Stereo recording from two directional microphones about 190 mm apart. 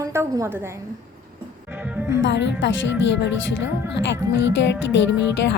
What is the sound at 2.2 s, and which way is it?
Speech, 70° left (ahead or behind).